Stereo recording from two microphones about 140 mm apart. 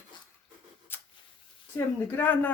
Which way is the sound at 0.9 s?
15° left (ahead or behind).